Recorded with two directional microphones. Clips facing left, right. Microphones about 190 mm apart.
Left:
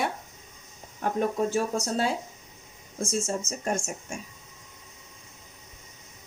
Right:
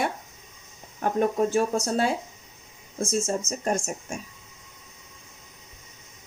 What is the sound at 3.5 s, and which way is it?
Speech, 35° right (ahead or behind).